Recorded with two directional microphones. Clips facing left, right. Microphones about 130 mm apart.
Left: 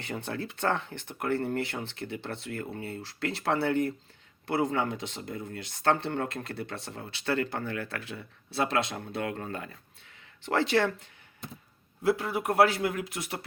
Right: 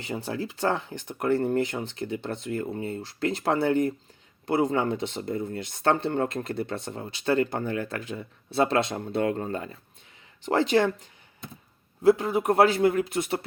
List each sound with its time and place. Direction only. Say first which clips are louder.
1.2 s speech: right 6 dB; 20° right (ahead or behind)
10.4 s speech: right 4 dB; 15° right (ahead or behind)
12.0 s speech: right 7 dB; 20° right (ahead or behind)